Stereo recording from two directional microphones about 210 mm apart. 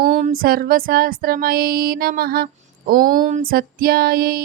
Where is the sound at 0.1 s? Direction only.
35° right (ahead or behind).